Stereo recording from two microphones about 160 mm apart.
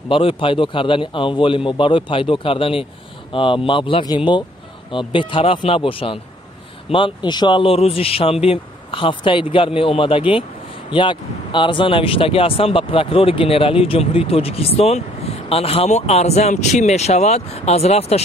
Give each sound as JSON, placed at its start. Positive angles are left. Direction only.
{"t": 0.1, "sound": "speech", "side_deg": 35}